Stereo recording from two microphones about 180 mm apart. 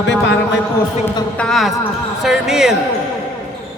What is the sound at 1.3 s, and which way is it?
Speech, centre (ahead or behind).